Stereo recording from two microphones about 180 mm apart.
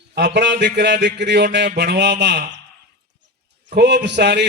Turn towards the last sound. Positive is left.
turn(degrees=-70)  # may be behind; listen again after turning